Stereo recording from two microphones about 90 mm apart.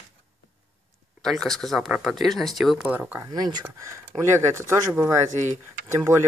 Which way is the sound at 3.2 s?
50° right (ahead or behind).